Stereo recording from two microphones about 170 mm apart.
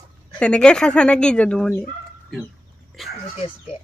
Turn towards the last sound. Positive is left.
turn(degrees=0)  # may be behind; listen again after turning